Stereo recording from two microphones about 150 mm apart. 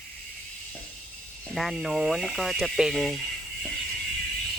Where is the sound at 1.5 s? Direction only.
Centre (ahead or behind).